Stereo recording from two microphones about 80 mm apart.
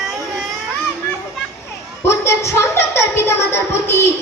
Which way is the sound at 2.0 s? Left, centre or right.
Left.